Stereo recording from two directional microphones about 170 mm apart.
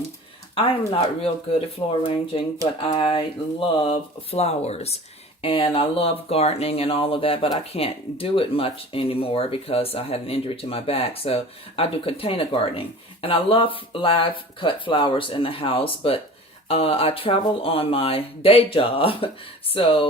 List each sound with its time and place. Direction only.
0.5 s speech: 35° left (ahead or behind)
1.8 s speech: 25° left (ahead or behind)